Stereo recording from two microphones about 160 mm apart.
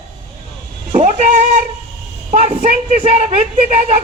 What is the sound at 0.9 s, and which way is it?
Speech, 45° right (ahead or behind).